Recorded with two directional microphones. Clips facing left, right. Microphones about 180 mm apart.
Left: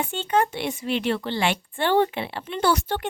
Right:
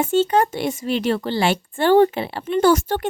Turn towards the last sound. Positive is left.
turn(degrees=-45)  # may be behind; listen again after turning